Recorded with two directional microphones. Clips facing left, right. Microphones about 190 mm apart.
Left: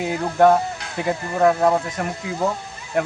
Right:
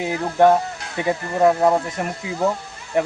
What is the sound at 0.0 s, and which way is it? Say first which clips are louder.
A man's voice: even; centre (ahead or behind).